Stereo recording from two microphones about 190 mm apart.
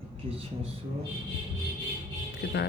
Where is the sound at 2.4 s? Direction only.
60° left (ahead or behind).